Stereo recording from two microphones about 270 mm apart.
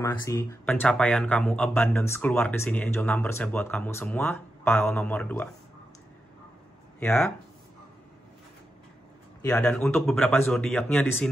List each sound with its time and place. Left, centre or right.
0.0 s speech: centre
7.0 s speech: centre
9.4 s speech: centre